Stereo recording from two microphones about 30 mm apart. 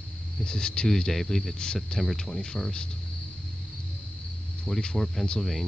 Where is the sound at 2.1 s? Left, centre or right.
Centre.